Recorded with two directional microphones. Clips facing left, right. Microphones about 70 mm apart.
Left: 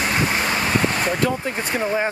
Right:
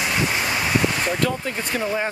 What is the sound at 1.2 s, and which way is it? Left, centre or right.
Speech, left.